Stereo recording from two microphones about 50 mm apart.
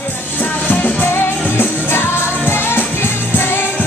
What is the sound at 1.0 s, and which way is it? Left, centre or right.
Music, left.